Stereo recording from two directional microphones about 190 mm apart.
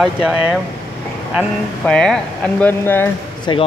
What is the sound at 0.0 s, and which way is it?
Speech, 5° right (ahead or behind).